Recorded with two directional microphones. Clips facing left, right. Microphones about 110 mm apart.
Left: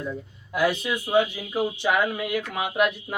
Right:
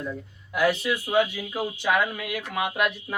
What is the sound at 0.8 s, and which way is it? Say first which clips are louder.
Speech: left 1 dB; 25° left (ahead or behind).